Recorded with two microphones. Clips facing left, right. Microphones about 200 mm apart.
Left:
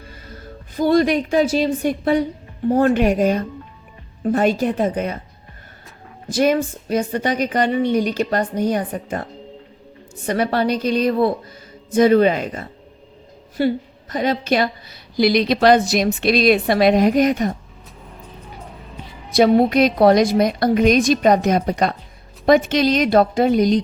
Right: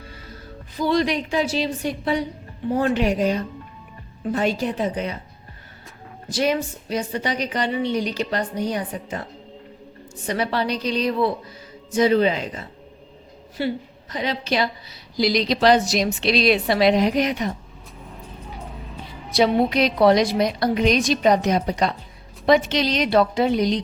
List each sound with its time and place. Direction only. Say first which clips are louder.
0.8 s a woman's voice: left 5 dB; 50° left (ahead or behind)
6.3 s a woman's voice: left 5 dB; 50° left (ahead or behind)
10.2 s a woman's voice: left 5 dB; 50° left (ahead or behind)
19.3 s a woman's voice: left 5 dB; 50° left (ahead or behind)